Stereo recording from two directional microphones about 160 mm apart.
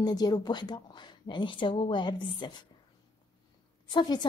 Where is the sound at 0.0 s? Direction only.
25° left (ahead or behind).